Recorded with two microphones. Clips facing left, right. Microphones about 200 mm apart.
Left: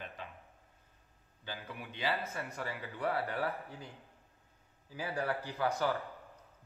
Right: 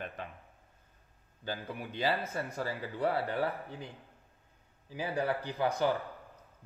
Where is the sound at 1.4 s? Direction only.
40° right (ahead or behind).